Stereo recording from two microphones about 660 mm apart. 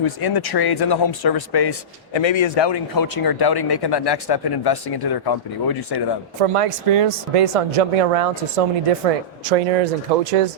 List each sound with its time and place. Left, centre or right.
0.0 s a man's voice: left
6.4 s speech: right
9.4 s speech: right